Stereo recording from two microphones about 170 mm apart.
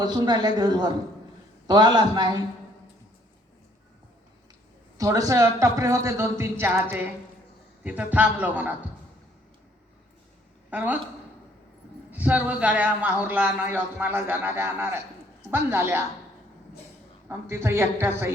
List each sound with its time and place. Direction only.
0.0 s a man's voice: 25° right (ahead or behind)
4.9 s a man's voice: 20° right (ahead or behind)
10.7 s a man's voice: 10° right (ahead or behind)
12.1 s a man's voice: 10° right (ahead or behind)
17.2 s a man's voice: 15° right (ahead or behind)